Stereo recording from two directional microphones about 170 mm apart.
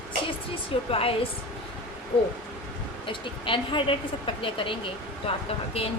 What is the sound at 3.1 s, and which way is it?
A woman's voice, 30° left (ahead or behind).